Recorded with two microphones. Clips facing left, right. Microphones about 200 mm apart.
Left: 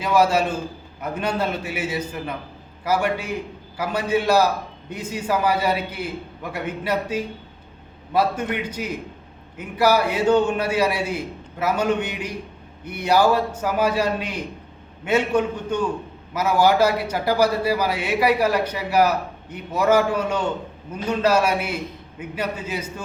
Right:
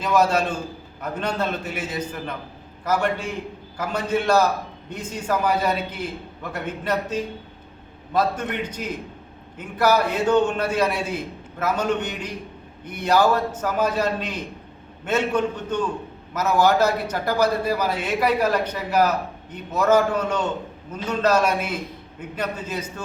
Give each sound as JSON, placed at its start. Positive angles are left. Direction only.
{"t": 0.0, "sound": "a man's voice", "side_deg": 10}